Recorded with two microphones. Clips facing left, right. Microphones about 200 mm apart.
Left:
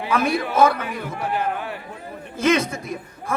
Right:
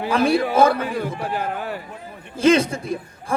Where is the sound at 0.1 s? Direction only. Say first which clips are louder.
Right 3 dB; 30° right (ahead or behind).